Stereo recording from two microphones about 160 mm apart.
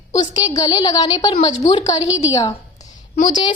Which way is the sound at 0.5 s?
20° left (ahead or behind).